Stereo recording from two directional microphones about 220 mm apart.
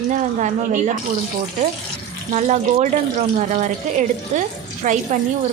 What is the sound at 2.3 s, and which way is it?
A woman's voice, 30° right (ahead or behind).